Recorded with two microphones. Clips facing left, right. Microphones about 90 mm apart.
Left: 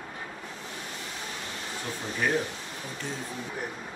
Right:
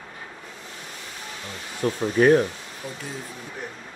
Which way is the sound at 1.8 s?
55° right (ahead or behind).